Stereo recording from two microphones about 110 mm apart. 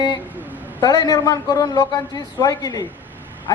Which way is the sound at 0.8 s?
35° left (ahead or behind).